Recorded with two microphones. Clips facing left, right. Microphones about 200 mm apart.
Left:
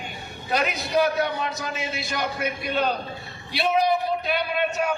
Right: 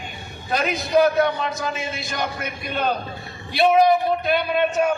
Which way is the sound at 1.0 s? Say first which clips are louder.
Right 5 dB; 50° right (ahead or behind).